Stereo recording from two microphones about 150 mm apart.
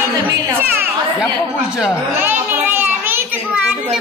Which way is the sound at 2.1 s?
15° right (ahead or behind).